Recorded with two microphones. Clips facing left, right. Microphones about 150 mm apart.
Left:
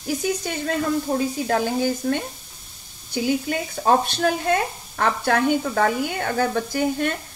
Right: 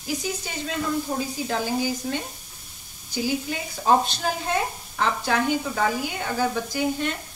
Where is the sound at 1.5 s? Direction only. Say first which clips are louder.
Left 3 dB; 55° left (ahead or behind).